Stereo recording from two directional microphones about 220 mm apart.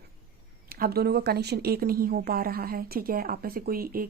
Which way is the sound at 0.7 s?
45° right (ahead or behind).